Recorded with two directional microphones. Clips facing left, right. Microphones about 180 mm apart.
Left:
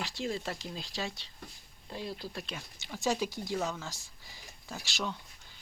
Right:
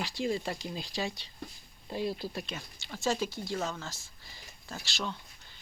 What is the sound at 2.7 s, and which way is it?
Speech, 15° left (ahead or behind).